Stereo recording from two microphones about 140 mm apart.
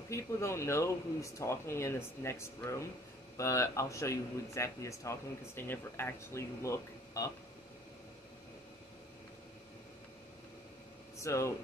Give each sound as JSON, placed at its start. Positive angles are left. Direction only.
{"t": 0.1, "sound": "speech", "side_deg": 20}
{"t": 11.1, "sound": "speech", "side_deg": 20}